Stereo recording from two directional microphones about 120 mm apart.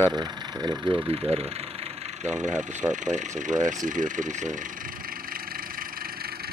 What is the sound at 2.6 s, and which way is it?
Speech, 90° right.